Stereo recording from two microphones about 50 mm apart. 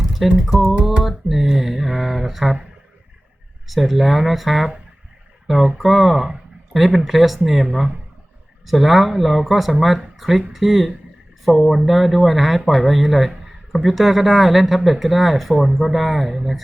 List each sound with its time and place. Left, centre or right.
0.4 s speech: centre
3.7 s speech: centre